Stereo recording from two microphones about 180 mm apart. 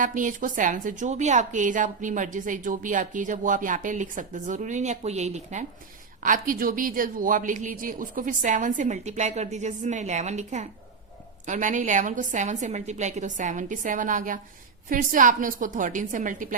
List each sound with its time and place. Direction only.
0.0 s a woman's voice: 45° right (ahead or behind)